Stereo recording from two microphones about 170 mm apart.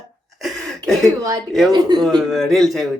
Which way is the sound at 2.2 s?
Centre (ahead or behind).